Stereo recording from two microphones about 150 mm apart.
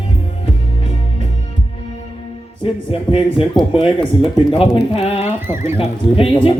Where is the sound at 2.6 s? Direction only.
35° left (ahead or behind).